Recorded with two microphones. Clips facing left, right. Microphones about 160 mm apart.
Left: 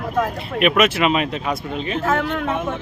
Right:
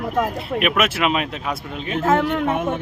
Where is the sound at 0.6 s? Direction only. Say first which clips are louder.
Left 4 dB; 5° right (ahead or behind).